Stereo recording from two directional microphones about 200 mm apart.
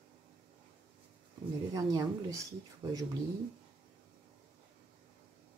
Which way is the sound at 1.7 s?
15° right (ahead or behind).